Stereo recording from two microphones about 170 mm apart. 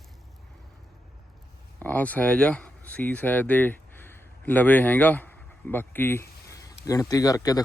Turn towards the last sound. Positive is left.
turn(degrees=20)  # may be behind; listen again after turning